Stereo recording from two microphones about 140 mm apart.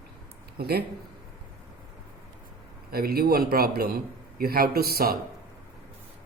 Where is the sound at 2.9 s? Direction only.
90° right.